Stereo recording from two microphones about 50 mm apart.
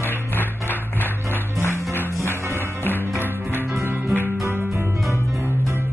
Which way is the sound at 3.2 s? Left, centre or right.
Right.